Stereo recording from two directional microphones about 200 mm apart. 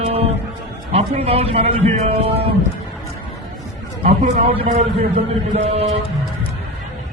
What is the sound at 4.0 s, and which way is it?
A man's voice, 30° right (ahead or behind).